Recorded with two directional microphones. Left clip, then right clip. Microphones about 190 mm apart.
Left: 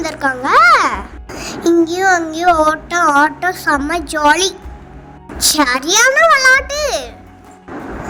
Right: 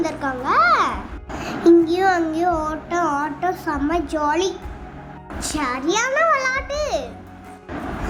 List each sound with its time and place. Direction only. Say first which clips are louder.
0.0 s a child's voice: left 6 dB; 35° left (ahead or behind)